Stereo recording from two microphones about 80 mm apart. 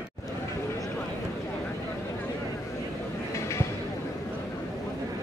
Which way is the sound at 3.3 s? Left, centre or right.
Left.